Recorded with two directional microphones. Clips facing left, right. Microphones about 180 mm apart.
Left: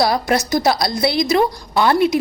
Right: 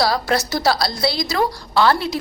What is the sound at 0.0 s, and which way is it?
A woman's voice, 20° left (ahead or behind).